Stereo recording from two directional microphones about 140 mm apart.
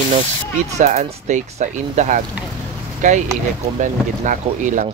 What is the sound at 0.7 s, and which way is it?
Speech, 55° right (ahead or behind).